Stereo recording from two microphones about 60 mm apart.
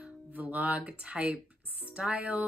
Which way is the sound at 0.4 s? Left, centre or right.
Right.